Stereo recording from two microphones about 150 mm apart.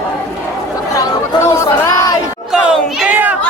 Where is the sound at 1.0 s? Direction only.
20° left (ahead or behind).